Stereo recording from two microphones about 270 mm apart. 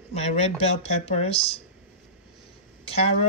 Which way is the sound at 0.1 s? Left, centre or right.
Left.